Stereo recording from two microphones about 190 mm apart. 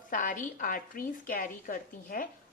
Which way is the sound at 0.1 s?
45° left (ahead or behind).